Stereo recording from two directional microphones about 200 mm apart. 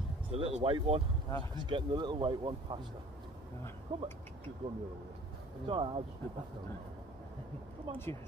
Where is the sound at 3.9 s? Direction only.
25° right (ahead or behind).